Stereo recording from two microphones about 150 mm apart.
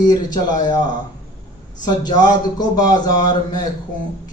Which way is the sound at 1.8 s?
25° left (ahead or behind).